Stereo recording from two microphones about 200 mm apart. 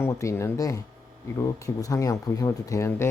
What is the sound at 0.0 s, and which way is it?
Speech, 15° left (ahead or behind).